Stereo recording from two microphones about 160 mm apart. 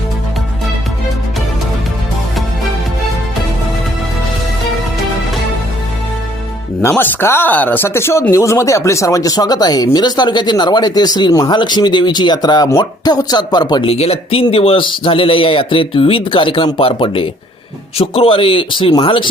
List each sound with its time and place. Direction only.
6.8 s speech: 10° left (ahead or behind)
13.9 s speech: 40° left (ahead or behind)